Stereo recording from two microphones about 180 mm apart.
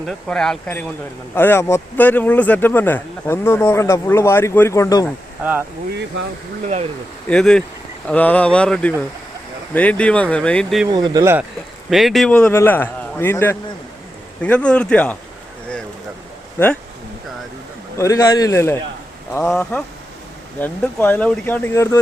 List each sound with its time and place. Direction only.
0.1 s speech: 5° left (ahead or behind); by 5.0 s 20° left (ahead or behind)
5.4 s speech: 10° right (ahead or behind)
7.3 s speech: 5° left (ahead or behind)
10.9 s speech: 20° right (ahead or behind)
11.9 s speech: centre (ahead or behind)
17.9 s speech: 20° left (ahead or behind)